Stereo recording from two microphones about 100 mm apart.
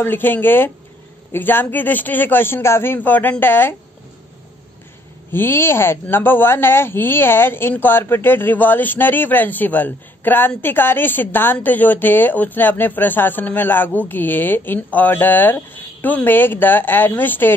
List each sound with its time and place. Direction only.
0.0 s a woman's voice: 20° left (ahead or behind)
5.3 s a woman's voice: 25° left (ahead or behind)